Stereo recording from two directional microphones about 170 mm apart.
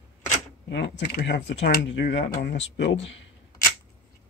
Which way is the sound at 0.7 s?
80° left.